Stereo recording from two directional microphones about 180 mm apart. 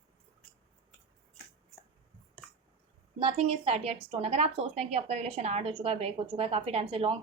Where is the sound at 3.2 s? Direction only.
30° right (ahead or behind).